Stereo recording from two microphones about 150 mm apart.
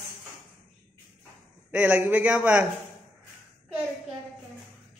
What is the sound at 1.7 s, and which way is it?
Speech, 10° right (ahead or behind).